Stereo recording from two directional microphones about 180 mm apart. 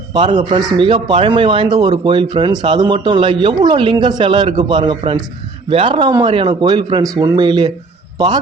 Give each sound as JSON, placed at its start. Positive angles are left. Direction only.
{"t": 0.1, "sound": "a man's voice", "side_deg": -25}